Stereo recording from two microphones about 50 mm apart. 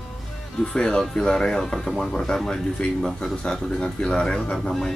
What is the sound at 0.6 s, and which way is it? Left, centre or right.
Speech, centre.